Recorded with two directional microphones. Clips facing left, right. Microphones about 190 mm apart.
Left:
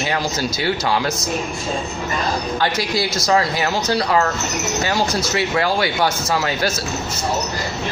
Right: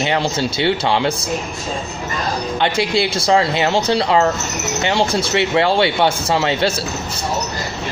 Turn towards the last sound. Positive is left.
turn(degrees=-30)  # may be behind; listen again after turning